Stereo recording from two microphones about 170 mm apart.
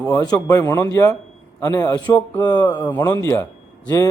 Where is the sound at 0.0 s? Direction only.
20° left (ahead or behind).